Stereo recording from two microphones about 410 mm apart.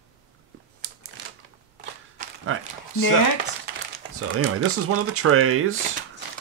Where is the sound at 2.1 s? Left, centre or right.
Right.